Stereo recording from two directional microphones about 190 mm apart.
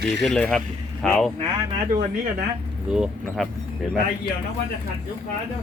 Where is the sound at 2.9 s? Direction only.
Centre (ahead or behind).